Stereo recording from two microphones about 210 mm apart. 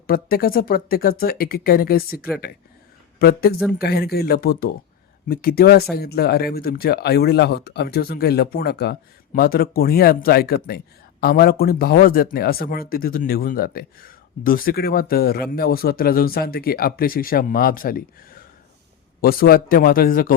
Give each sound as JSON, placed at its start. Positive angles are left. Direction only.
{"t": 0.1, "sound": "speech", "side_deg": 45}
{"t": 3.2, "sound": "speech", "side_deg": 45}